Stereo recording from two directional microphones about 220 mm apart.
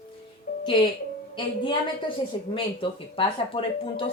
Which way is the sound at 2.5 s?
25° left (ahead or behind).